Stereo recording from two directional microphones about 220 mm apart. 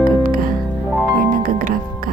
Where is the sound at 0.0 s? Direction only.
40° right (ahead or behind).